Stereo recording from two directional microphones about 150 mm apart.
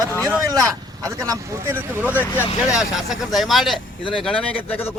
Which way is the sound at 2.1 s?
15° left (ahead or behind).